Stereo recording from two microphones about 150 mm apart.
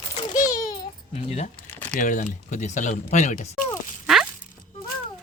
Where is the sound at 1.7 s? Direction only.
10° left (ahead or behind).